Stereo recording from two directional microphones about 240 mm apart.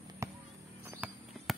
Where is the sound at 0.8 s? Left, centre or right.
Centre.